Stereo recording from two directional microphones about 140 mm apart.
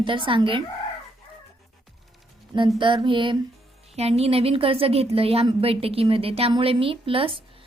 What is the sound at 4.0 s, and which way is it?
A woman's voice, 45° right (ahead or behind).